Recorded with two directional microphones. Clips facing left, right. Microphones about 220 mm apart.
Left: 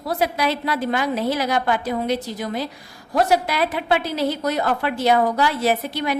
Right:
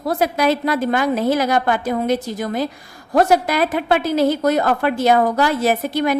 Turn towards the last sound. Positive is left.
turn(degrees=-45)  # may be behind; listen again after turning